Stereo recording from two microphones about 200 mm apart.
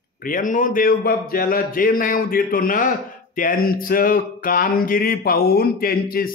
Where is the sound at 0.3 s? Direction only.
40° left (ahead or behind).